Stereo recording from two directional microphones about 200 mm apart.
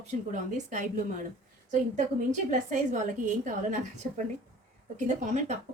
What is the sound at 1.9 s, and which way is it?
A woman's voice, 40° right (ahead or behind).